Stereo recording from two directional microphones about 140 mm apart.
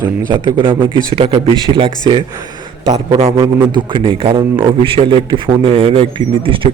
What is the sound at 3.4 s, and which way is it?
Speech, 15° right (ahead or behind).